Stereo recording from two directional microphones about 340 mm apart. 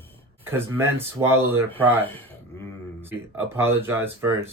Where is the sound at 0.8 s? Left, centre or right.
Centre.